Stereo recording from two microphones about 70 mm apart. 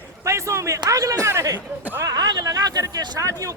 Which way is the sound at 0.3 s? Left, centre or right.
Right.